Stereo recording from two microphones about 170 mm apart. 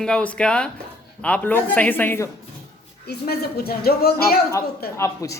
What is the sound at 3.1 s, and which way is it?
Speech, 70° left (ahead or behind).